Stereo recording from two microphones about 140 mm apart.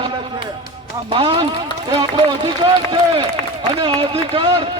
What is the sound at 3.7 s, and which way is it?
Speech, 35° right (ahead or behind).